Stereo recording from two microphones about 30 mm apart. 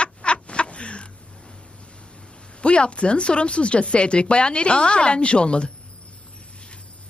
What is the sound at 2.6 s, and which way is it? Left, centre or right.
Speech, left.